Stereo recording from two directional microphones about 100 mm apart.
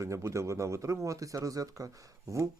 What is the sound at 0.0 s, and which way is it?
Speech, 30° right (ahead or behind).